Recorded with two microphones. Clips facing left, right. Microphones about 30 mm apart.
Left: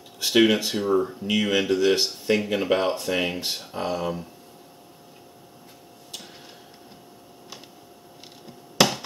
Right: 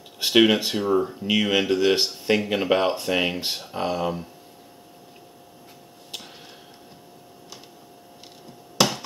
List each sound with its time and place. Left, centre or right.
0.2 s speech: centre
6.1 s tick-tock: right
8.7 s chop: centre